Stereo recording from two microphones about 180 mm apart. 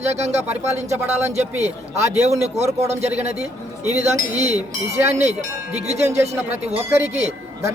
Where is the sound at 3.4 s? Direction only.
40° right (ahead or behind).